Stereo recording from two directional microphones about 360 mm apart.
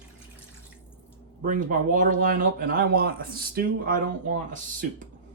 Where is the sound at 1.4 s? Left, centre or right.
Right.